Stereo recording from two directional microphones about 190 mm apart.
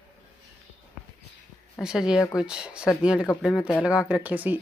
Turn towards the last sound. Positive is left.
turn(degrees=-10)  # may be behind; listen again after turning